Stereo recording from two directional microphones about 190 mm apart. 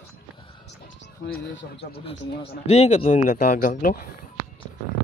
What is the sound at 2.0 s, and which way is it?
Speech, 30° left (ahead or behind).